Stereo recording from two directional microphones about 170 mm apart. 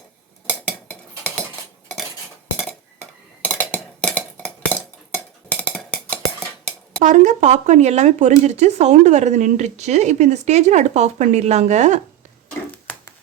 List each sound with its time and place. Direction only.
0.4 s dishes: 10° left (ahead or behind)
3.4 s cutlery: 10° left (ahead or behind)
7.0 s speech: 45° right (ahead or behind)
12.7 s a sound: 10° left (ahead or behind)